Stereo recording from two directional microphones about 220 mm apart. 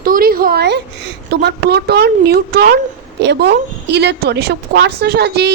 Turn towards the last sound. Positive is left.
turn(degrees=-45)  # may be behind; listen again after turning